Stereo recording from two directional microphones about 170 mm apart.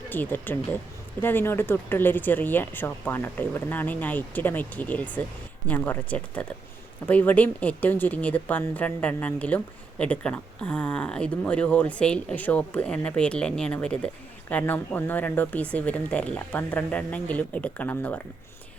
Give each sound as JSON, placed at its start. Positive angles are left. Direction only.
{"t": 0.1, "sound": "speech", "side_deg": 10}